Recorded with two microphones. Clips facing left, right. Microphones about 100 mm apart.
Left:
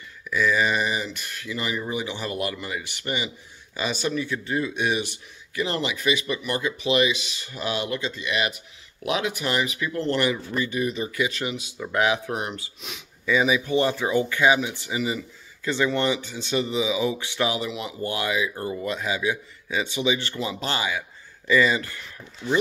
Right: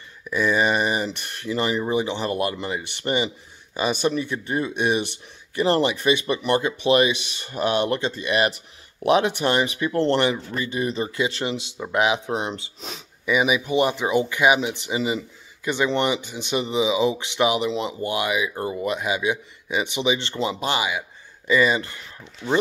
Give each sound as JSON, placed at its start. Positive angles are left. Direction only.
{"t": 0.2, "sound": "speech", "side_deg": -25}
{"t": 3.8, "sound": "speech", "side_deg": -50}
{"t": 4.1, "sound": "speech", "side_deg": -25}
{"t": 8.2, "sound": "speech", "side_deg": -45}
{"t": 9.0, "sound": "speech", "side_deg": -35}
{"t": 13.2, "sound": "speech", "side_deg": -15}